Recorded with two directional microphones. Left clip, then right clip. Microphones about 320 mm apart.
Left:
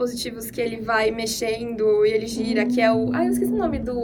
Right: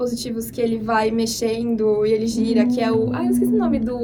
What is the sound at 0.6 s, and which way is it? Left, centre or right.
A woman's voice, centre.